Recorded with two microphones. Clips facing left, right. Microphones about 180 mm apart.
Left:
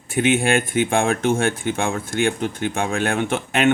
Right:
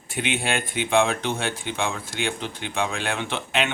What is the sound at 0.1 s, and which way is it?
Speech, 50° left (ahead or behind).